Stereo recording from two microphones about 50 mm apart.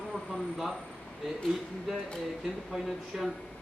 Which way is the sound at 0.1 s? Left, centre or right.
Centre.